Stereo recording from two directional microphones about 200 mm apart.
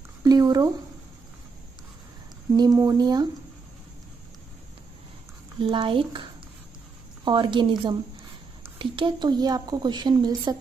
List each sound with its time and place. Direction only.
0.2 s a sound: 20° right (ahead or behind)
2.5 s a woman's voice: 20° right (ahead or behind)
5.6 s a woman's voice: 25° right (ahead or behind)
7.2 s a woman's voice: 25° right (ahead or behind)